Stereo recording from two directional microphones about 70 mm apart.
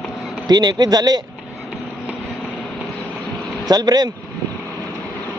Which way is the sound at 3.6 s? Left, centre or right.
Right.